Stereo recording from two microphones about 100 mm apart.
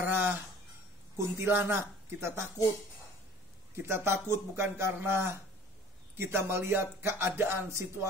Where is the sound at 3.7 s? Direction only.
25° right (ahead or behind).